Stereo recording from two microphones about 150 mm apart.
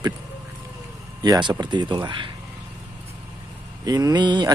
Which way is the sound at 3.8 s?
25° right (ahead or behind).